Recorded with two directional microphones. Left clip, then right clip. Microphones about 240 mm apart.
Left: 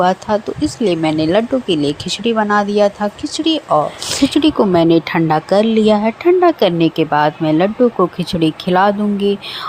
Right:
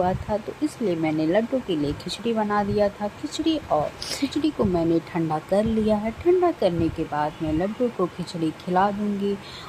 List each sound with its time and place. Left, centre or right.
0.0 s speech: centre
4.4 s speech: left